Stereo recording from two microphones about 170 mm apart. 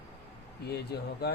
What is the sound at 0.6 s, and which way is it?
Speech, 70° left (ahead or behind).